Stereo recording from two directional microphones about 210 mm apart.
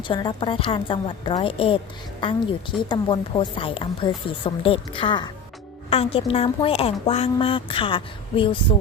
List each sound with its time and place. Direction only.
0.1 s speech: 25° left (ahead or behind)
2.9 s speech: 25° left (ahead or behind)